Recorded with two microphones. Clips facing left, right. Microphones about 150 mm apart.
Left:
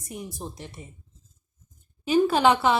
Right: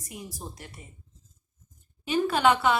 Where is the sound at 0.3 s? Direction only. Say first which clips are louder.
Left 4 dB; 20° left (ahead or behind).